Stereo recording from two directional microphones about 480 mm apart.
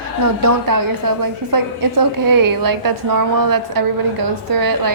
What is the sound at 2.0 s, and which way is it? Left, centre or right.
A woman's voice, right.